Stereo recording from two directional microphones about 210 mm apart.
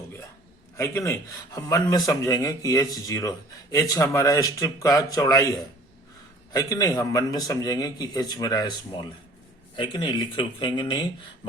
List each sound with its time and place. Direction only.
0.8 s a man's voice: 15° left (ahead or behind)
6.5 s a man's voice: 15° left (ahead or behind)